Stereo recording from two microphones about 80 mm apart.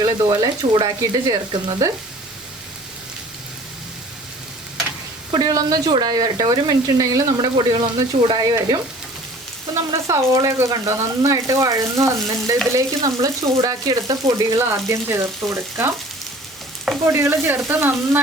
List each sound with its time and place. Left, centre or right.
0.0 s speech: right
5.4 s speech: right
10.1 s speech: right
17.0 s stir: right
17.7 s speech: right